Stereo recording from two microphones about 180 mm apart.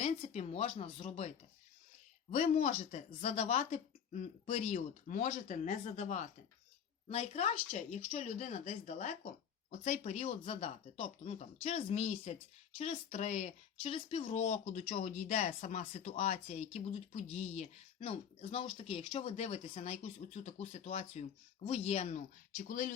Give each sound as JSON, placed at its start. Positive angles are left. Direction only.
{"t": 0.0, "sound": "speech", "side_deg": 35}
{"t": 2.3, "sound": "speech", "side_deg": 40}